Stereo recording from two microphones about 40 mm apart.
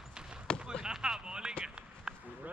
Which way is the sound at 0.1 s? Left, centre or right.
Centre.